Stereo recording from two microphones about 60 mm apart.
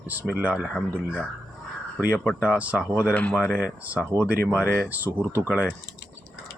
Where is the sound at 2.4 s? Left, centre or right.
Right.